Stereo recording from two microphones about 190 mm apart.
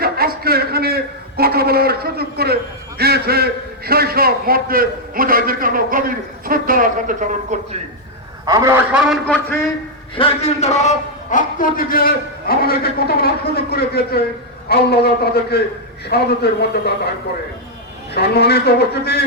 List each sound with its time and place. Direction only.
0.0 s a sound: 55° right (ahead or behind)
3.0 s a man's voice: 55° right (ahead or behind)
8.4 s a man's voice: 15° right (ahead or behind); by 9.6 s 5° left (ahead or behind)
10.2 s a man's voice: 30° left (ahead or behind); by 16.9 s 60° left (ahead or behind)
18.1 s a man's voice: 60° left (ahead or behind)